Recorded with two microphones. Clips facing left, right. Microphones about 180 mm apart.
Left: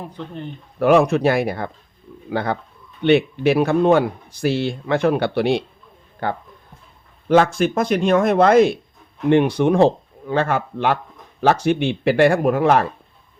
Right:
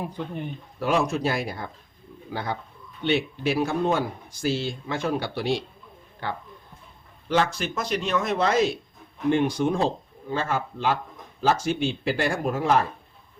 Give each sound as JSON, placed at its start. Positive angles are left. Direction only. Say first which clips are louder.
{"t": 0.0, "sound": "speech", "louder": "even", "side_deg": -10}
{"t": 0.8, "sound": "a man's voice", "louder": "left 9 dB", "side_deg": 60}
{"t": 6.2, "sound": "a man's voice", "louder": "left 7 dB", "side_deg": 50}